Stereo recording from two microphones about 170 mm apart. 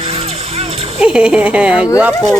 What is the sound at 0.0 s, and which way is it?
Music, 35° right (ahead or behind).